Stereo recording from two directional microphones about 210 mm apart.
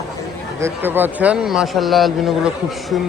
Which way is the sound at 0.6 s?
10° right (ahead or behind).